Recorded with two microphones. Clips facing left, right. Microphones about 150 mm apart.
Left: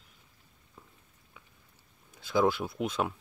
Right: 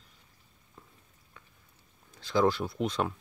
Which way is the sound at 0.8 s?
5° left (ahead or behind).